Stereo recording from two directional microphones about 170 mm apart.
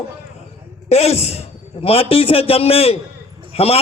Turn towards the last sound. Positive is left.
turn(degrees=35)  # may be behind; listen again after turning